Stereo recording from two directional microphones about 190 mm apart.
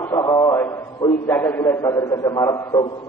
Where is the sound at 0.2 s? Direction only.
15° left (ahead or behind).